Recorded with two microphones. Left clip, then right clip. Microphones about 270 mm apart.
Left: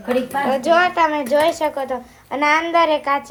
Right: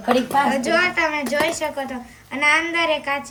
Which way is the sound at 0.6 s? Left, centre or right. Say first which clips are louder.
Left 4 dB; centre.